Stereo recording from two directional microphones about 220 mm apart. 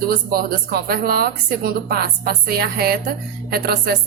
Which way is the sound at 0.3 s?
45° right (ahead or behind).